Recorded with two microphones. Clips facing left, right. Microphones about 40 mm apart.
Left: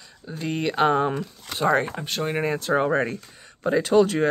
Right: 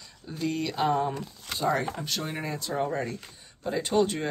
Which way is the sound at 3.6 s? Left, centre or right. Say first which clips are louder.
Left 7 dB; left.